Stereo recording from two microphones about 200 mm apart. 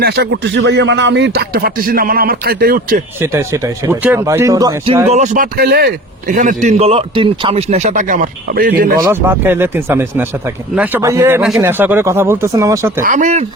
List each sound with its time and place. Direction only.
0.0 s speech: 55° right (ahead or behind)
3.2 s speech: 15° right (ahead or behind)
5.0 s a man's voice: 35° right (ahead or behind)
9.0 s speech: 10° right (ahead or behind)
13.0 s a man's voice: 40° right (ahead or behind)